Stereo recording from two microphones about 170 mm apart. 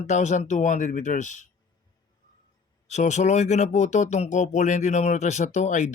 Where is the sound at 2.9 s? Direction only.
45° left (ahead or behind).